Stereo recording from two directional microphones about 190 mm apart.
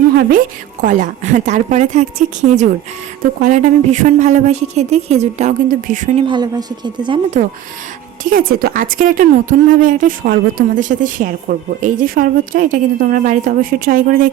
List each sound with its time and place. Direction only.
0.2 s a woman's voice: 45° right (ahead or behind)
6.2 s a woman's voice: 20° right (ahead or behind)
8.2 s a woman's voice: 45° right (ahead or behind)